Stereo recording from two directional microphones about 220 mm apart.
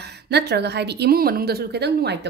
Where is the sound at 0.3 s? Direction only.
50° right (ahead or behind).